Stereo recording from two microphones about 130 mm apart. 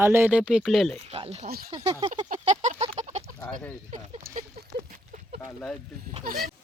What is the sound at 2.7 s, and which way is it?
Chicken, 55° right (ahead or behind).